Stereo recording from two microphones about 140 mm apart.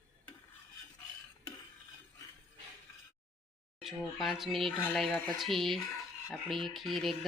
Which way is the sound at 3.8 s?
Centre (ahead or behind).